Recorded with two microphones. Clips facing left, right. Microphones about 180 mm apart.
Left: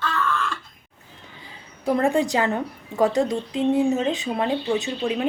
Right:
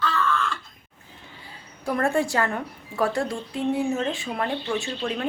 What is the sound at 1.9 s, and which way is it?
Speech, 20° left (ahead or behind).